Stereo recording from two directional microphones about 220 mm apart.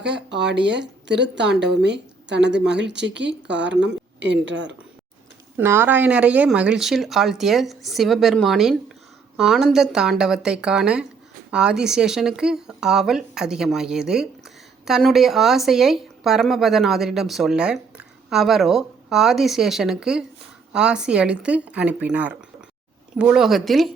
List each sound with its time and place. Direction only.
0.0 s a woman's voice: 50° right (ahead or behind)
5.5 s speech: 10° right (ahead or behind)